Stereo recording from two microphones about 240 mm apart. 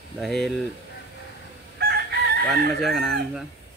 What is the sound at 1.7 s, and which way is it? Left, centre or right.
Chicken, right.